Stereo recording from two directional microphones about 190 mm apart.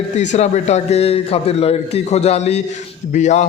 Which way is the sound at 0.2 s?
40° left (ahead or behind).